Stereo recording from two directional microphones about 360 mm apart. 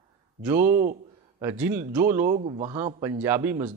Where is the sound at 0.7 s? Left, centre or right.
Right.